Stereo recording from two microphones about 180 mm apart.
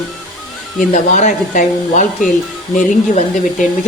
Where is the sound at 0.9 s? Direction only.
40° left (ahead or behind).